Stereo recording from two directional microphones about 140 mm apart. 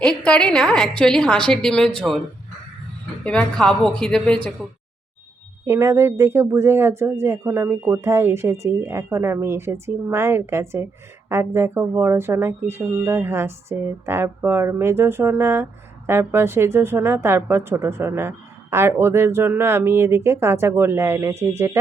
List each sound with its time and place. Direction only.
0.0 s a woman's voice: 5° left (ahead or behind)
3.2 s a woman's voice: 5° left (ahead or behind)
5.6 s a woman's voice: 20° right (ahead or behind)